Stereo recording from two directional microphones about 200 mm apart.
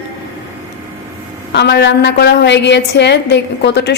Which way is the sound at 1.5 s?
55° left (ahead or behind).